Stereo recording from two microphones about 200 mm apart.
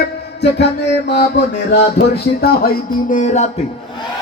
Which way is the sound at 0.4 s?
60° left (ahead or behind).